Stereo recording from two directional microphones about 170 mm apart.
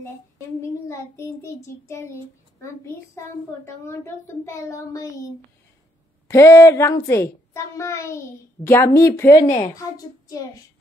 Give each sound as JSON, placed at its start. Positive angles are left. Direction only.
{"t": 0.6, "sound": "a child's voice", "side_deg": 15}